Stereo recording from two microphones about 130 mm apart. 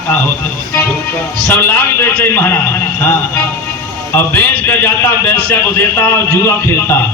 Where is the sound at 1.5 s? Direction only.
15° left (ahead or behind).